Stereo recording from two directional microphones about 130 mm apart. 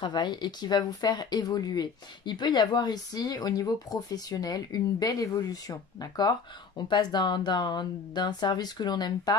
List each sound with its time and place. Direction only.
0.0 s speech: 35° left (ahead or behind)